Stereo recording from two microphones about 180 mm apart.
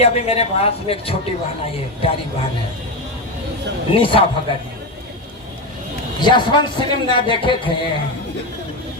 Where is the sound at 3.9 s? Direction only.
30° left (ahead or behind).